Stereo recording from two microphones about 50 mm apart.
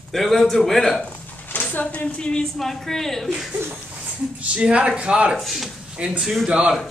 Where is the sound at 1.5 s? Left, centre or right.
Left; by 2.4 s centre.